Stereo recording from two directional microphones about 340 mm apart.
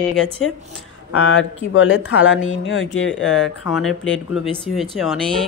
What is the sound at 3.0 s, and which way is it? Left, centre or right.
Speech, centre.